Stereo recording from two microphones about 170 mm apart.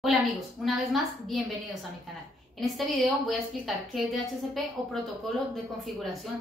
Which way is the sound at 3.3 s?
Centre (ahead or behind).